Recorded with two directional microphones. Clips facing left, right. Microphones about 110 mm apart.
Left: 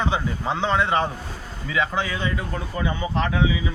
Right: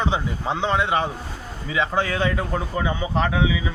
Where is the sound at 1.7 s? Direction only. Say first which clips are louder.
Even; 25° right (ahead or behind).